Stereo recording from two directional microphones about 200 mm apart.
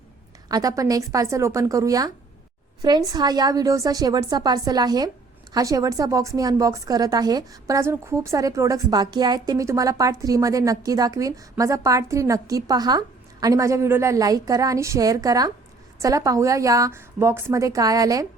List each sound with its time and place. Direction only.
0.4 s a woman's voice: 15° right (ahead or behind)